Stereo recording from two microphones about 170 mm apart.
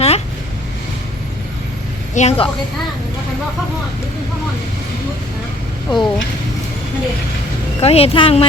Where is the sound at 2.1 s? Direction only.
40° left (ahead or behind).